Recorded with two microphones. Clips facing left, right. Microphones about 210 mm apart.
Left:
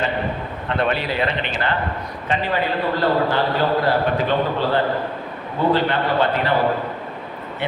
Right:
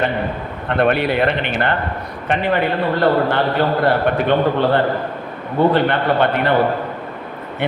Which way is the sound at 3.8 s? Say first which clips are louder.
Right 3 dB; 60° right (ahead or behind).